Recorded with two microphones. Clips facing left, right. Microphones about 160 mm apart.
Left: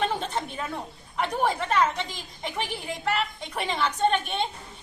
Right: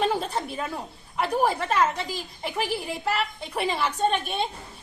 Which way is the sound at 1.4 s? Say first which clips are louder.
Right 1 dB; 5° right (ahead or behind).